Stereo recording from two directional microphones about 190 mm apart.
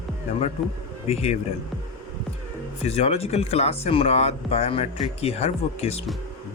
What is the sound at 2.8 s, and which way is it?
Speech, 35° left (ahead or behind).